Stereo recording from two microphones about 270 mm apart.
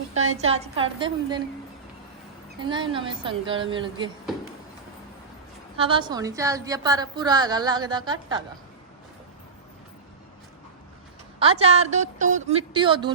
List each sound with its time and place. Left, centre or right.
0.5 s a woman's voice: centre
2.6 s a woman's voice: centre
5.7 s a woman's voice: centre
11.3 s a woman's voice: right